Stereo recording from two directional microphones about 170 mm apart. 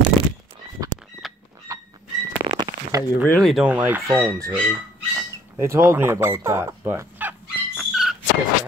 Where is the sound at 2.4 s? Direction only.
25° right (ahead or behind).